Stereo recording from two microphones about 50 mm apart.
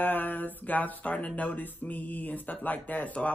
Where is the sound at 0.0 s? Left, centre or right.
Left.